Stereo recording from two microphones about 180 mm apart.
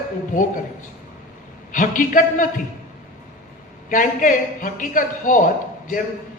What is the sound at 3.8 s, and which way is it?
A man's voice, 50° left (ahead or behind).